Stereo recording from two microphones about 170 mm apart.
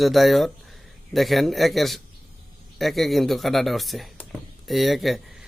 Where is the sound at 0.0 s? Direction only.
Centre (ahead or behind).